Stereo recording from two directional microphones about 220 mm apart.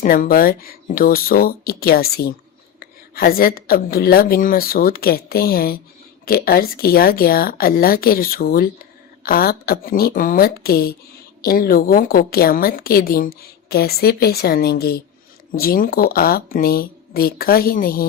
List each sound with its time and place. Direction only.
0.0 s a woman's voice: 40° left (ahead or behind)